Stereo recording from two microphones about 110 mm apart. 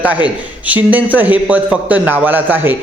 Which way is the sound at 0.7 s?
15° right (ahead or behind).